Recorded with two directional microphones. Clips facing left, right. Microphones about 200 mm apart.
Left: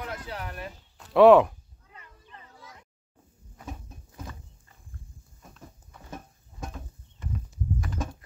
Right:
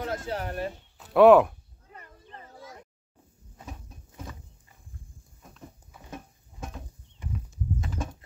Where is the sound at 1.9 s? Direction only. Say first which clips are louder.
Right 4 dB; 45° right (ahead or behind).